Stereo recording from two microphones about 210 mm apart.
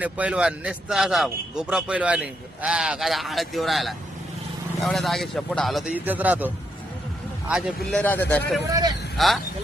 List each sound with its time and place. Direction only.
0.0 s a man's voice: 5° right (ahead or behind)
8.7 s speech: 20° right (ahead or behind)
9.1 s speech: centre (ahead or behind)